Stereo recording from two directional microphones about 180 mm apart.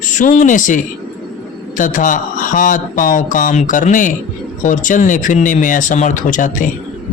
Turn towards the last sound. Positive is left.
turn(degrees=45)  # may be behind; listen again after turning